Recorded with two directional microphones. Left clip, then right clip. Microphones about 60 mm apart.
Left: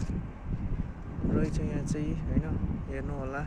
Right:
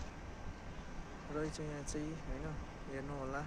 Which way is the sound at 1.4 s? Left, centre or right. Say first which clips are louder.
Left 4 dB; centre.